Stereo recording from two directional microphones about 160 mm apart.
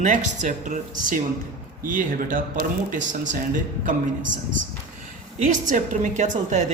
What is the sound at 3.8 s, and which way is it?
A woman's voice, 55° right (ahead or behind).